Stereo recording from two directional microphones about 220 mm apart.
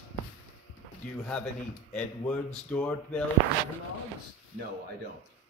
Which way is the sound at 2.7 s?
5° left (ahead or behind).